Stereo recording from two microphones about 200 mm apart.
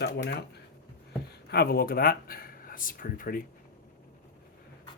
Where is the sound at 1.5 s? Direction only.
50° left (ahead or behind).